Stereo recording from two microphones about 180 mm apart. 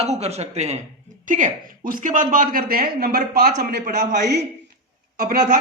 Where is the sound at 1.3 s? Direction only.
50° right (ahead or behind).